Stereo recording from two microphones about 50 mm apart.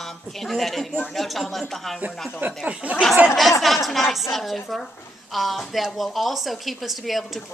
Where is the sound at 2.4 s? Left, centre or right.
Right.